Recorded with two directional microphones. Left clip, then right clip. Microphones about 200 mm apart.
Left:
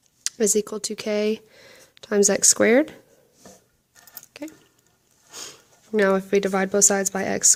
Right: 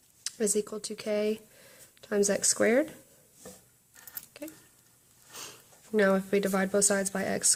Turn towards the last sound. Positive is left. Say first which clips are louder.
# left 8 dB
turn(degrees=40)  # may be behind; listen again after turning